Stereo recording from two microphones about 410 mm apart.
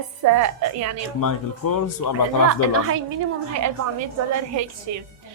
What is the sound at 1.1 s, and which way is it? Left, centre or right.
Speech, left.